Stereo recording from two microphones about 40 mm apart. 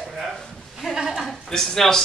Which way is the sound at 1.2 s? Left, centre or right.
Centre.